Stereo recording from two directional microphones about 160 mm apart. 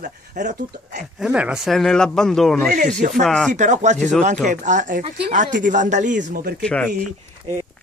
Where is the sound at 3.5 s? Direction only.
50° right (ahead or behind).